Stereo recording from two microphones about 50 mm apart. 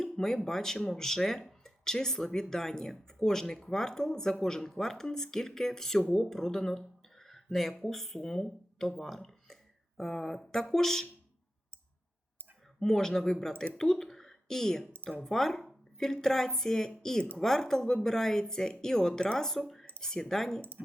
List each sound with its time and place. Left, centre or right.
0.0 s a sound: centre
0.4 s speech: centre
12.8 s speech: centre
20.6 s speech: right